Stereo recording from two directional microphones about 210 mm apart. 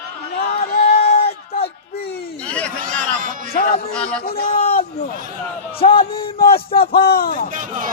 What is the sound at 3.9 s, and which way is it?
Speech, 5° left (ahead or behind).